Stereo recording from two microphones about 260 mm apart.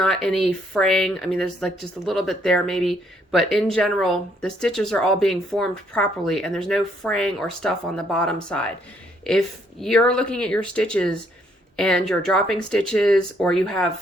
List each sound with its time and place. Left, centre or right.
0.0 s speech: centre
9.8 s speech: centre